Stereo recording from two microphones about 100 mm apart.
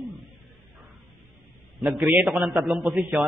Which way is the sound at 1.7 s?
5° right (ahead or behind).